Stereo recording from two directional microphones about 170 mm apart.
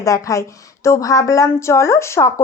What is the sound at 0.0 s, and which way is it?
Speech, 20° left (ahead or behind).